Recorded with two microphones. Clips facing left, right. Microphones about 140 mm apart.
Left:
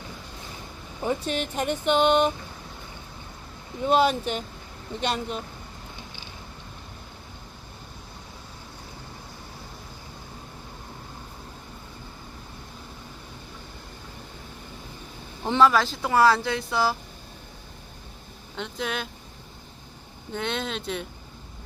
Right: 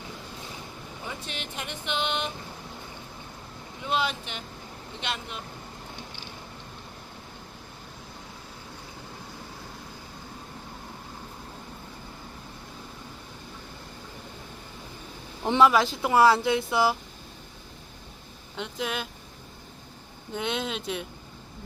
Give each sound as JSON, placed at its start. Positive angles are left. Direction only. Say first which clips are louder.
{"t": 1.0, "sound": "speech", "louder": "left 12 dB", "side_deg": 45}
{"t": 3.8, "sound": "speech", "louder": "left 8 dB", "side_deg": 45}
{"t": 15.4, "sound": "speech", "louder": "even", "side_deg": -20}
{"t": 18.5, "sound": "speech", "louder": "left 1 dB", "side_deg": -5}
{"t": 20.3, "sound": "speech", "louder": "left 1 dB", "side_deg": -10}